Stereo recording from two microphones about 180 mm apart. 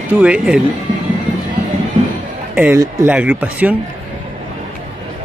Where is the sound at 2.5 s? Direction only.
10° right (ahead or behind).